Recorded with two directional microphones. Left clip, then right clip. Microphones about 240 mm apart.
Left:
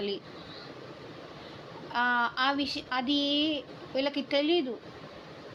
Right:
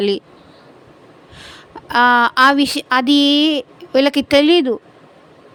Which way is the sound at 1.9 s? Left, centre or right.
Right.